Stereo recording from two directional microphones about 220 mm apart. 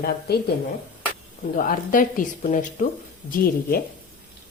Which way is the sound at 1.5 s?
40° left (ahead or behind).